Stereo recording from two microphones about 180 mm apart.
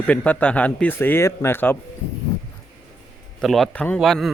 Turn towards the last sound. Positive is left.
turn(degrees=0)  # may be behind; listen again after turning